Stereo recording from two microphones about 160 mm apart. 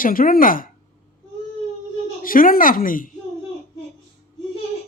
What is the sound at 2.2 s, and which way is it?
Speech, 60° left (ahead or behind).